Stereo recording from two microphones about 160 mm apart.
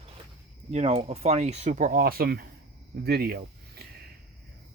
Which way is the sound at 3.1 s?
80° right.